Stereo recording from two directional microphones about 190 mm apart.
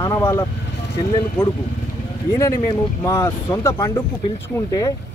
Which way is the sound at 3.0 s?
20° left (ahead or behind).